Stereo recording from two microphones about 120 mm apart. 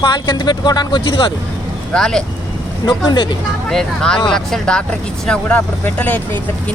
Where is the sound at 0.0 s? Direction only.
35° left (ahead or behind).